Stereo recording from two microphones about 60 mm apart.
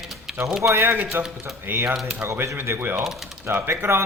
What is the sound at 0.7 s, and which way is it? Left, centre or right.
Speech, right.